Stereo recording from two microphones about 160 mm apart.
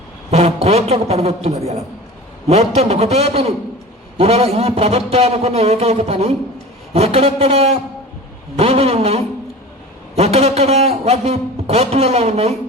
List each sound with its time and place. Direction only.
0.3 s a man's voice: 40° right (ahead or behind)